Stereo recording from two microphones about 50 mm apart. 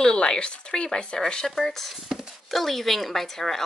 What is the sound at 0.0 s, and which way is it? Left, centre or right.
Speech, centre.